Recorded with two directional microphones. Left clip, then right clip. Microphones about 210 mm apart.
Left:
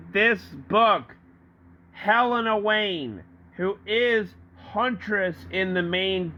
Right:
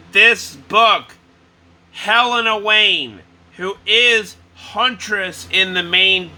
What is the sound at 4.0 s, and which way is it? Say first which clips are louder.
Speech: right 9 dB; 20° left (ahead or behind).